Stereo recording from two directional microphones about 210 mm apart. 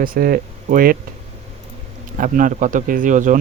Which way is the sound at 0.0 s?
45° right (ahead or behind).